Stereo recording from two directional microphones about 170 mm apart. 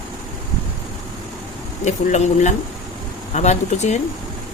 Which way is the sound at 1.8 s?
45° left (ahead or behind).